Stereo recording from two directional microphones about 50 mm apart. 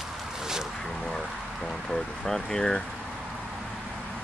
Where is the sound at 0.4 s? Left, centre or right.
Centre.